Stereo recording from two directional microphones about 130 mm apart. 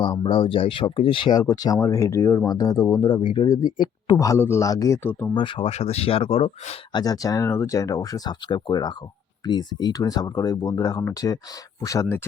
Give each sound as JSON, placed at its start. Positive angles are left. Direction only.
{"t": 0.0, "sound": "speech", "side_deg": 40}
{"t": 5.3, "sound": "speech", "side_deg": 40}
{"t": 5.7, "sound": "speech", "side_deg": 55}
{"t": 6.9, "sound": "speech", "side_deg": 30}